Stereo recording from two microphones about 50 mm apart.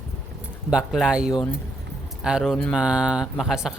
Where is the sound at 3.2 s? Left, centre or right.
Centre.